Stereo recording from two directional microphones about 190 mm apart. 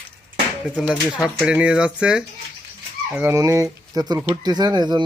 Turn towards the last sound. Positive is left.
turn(degrees=-20)  # may be behind; listen again after turning